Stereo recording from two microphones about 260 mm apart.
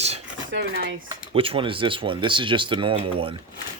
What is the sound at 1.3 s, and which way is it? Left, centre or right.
Speech, right.